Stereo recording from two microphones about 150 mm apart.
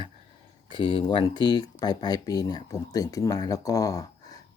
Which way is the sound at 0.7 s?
30° left (ahead or behind).